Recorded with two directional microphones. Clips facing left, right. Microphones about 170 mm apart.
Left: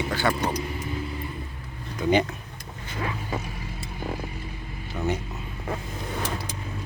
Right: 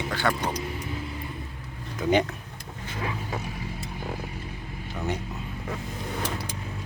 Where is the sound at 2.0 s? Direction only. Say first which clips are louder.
Left 1 dB; centre (ahead or behind).